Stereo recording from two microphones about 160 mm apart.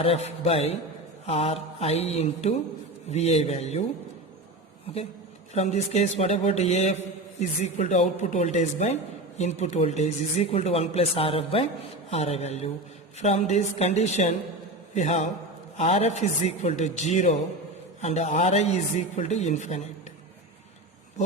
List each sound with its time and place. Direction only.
0.3 s speech: 40° left (ahead or behind)
5.5 s a man's voice: 45° left (ahead or behind)